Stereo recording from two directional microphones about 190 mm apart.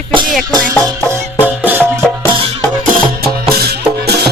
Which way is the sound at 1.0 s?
10° right (ahead or behind).